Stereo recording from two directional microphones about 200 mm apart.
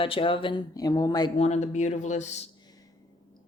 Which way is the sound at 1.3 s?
35° left (ahead or behind).